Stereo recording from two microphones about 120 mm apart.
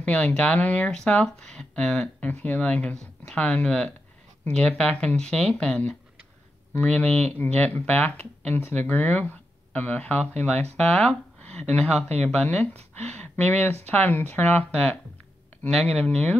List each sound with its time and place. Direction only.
0.0 s speech: 10° left (ahead or behind)